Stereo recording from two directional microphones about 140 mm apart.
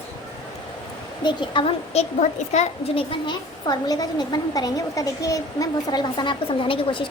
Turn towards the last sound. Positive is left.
turn(degrees=40)  # may be behind; listen again after turning